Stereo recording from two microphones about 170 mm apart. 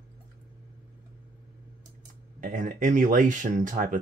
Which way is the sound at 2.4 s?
50° right (ahead or behind).